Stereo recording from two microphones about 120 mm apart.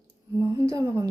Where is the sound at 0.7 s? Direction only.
30° right (ahead or behind).